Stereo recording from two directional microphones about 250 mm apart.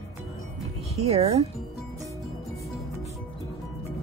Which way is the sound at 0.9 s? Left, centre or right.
Right.